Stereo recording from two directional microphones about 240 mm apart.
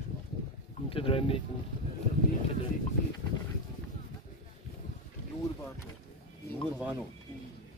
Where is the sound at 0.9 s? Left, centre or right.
Left.